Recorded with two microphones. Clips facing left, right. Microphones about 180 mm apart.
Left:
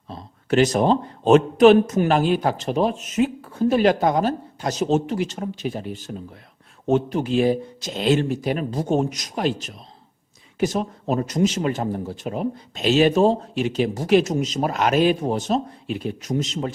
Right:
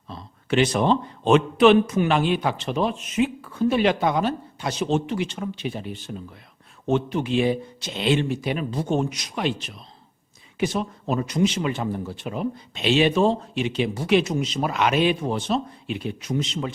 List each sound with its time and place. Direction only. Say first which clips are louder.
0.1 s speech: left 2 dB; 40° left (ahead or behind)